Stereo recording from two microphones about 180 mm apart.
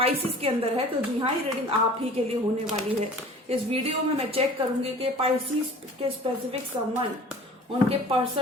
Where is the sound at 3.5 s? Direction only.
35° right (ahead or behind).